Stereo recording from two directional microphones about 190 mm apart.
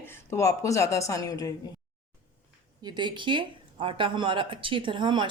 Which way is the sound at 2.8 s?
25° right (ahead or behind).